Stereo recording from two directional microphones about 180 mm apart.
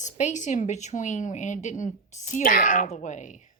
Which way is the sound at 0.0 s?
40° left (ahead or behind).